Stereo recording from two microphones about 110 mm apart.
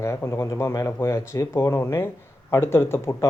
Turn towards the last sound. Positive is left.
turn(degrees=20)  # may be behind; listen again after turning